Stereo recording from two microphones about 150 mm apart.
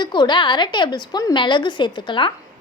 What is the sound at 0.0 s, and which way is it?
A woman's voice, 30° left (ahead or behind).